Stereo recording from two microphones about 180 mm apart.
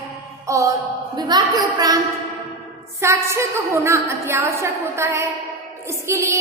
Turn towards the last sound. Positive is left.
turn(degrees=-15)  # may be behind; listen again after turning